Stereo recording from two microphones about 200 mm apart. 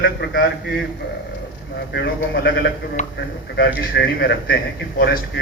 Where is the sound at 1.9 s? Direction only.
55° left (ahead or behind).